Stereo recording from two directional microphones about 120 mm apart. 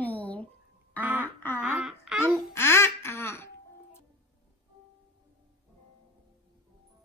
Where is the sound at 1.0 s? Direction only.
15° right (ahead or behind).